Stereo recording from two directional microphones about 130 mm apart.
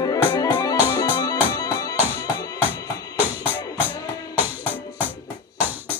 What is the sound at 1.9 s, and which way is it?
Music, 15° right (ahead or behind).